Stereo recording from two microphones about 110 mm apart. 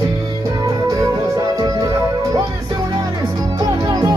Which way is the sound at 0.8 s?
35° right (ahead or behind).